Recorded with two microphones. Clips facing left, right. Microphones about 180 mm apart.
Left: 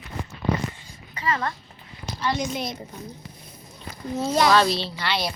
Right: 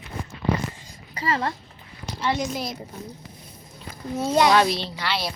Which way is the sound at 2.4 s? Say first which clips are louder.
Even; centre (ahead or behind).